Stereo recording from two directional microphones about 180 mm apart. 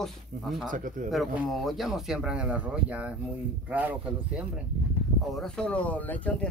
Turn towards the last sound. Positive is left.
turn(degrees=10)  # may be behind; listen again after turning